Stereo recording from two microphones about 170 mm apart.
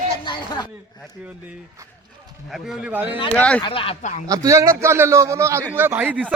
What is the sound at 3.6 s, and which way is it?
Speech, 30° left (ahead or behind).